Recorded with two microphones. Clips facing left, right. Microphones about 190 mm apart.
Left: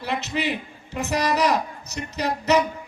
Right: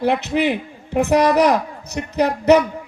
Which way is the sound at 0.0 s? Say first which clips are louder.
Right 8 dB; 55° right (ahead or behind).